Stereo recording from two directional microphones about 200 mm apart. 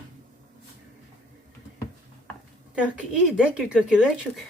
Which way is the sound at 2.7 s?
5° right (ahead or behind).